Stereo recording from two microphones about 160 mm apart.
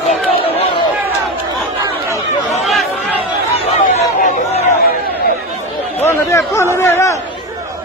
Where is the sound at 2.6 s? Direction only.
Centre (ahead or behind).